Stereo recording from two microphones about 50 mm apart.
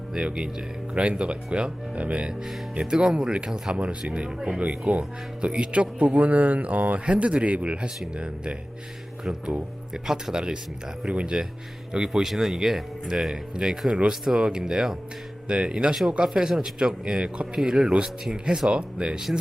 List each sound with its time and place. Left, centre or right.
0.3 s speech: centre
9.9 s speech: centre
11.9 s speech: centre